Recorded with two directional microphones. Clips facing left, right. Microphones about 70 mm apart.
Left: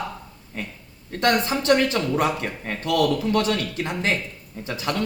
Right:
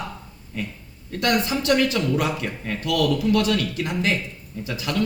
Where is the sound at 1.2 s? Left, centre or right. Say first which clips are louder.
Left 1 dB; left.